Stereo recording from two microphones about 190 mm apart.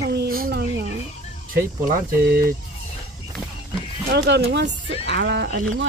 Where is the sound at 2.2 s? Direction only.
55° right (ahead or behind).